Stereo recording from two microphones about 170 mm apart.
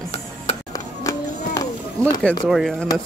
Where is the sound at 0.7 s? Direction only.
20° left (ahead or behind).